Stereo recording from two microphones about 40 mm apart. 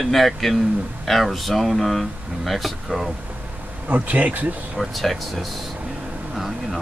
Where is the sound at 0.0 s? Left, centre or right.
Centre.